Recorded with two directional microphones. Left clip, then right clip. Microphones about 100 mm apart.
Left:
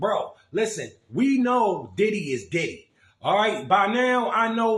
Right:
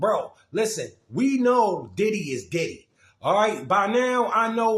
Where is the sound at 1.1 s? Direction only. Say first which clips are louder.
Right 1 dB; 30° right (ahead or behind).